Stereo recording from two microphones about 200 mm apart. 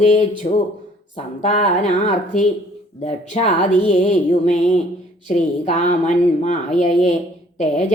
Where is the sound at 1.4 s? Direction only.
35° left (ahead or behind).